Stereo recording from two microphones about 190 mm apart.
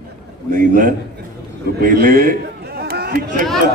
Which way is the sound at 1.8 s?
50° right (ahead or behind).